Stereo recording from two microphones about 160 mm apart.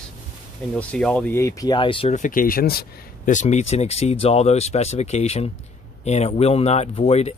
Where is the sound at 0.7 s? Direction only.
5° left (ahead or behind).